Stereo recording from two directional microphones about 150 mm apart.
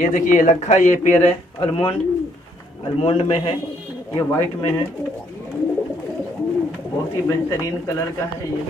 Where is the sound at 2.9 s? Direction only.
40° left (ahead or behind).